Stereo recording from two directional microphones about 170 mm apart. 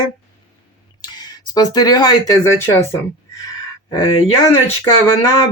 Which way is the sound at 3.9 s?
30° left (ahead or behind).